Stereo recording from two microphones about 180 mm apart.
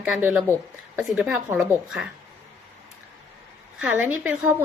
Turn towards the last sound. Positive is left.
turn(degrees=-10)  # may be behind; listen again after turning